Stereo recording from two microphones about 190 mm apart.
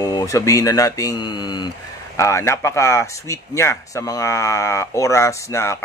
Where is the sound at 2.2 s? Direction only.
15° left (ahead or behind).